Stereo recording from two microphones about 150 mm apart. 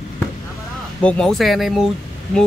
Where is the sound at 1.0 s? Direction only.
5° left (ahead or behind).